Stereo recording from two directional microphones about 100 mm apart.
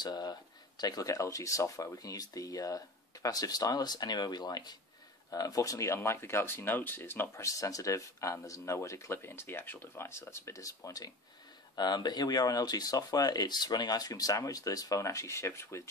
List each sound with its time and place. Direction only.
0.0 s speech: 45° left (ahead or behind); by 7.4 s 20° left (ahead or behind)
7.4 s speech: 35° left (ahead or behind)